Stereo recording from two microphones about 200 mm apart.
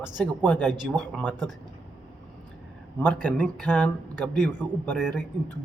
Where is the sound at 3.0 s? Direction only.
5° left (ahead or behind).